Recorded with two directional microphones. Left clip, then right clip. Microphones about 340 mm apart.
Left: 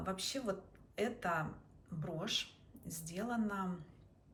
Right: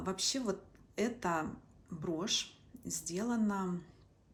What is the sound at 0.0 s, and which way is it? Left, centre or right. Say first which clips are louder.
Speech: right 4 dB; centre.